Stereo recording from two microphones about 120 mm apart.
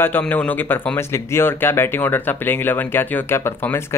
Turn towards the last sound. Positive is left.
turn(degrees=20)  # may be behind; listen again after turning